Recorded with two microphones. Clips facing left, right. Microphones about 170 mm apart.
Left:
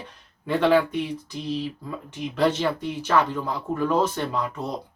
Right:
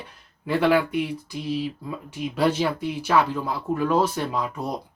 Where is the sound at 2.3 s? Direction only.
10° right (ahead or behind).